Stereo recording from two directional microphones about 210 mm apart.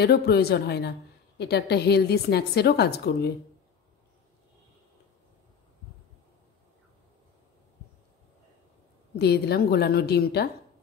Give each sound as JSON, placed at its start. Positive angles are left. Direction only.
{"t": 0.0, "sound": "a woman's voice", "side_deg": 50}
{"t": 9.2, "sound": "a woman's voice", "side_deg": 50}